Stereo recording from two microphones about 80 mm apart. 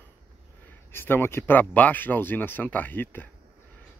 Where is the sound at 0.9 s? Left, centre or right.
Left.